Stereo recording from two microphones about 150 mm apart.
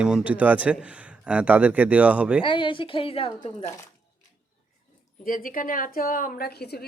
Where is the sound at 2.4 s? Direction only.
35° left (ahead or behind).